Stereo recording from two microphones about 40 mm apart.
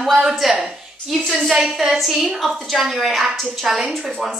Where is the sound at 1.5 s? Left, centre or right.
Centre.